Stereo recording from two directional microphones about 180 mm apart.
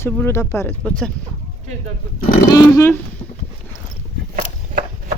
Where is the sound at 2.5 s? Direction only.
15° left (ahead or behind).